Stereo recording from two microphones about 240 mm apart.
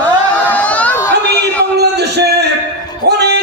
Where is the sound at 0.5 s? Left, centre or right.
Centre.